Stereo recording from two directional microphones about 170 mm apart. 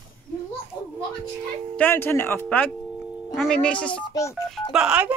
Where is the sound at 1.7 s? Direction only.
10° left (ahead or behind).